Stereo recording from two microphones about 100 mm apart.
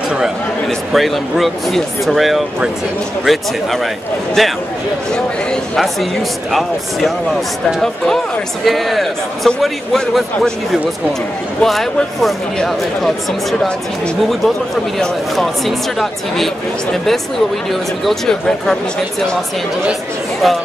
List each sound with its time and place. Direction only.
0.7 s speech: centre (ahead or behind)
8.6 s speech: centre (ahead or behind)
20.4 s speech: centre (ahead or behind)